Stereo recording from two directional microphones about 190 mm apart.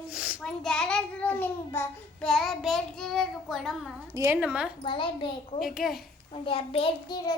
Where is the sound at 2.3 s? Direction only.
Centre (ahead or behind).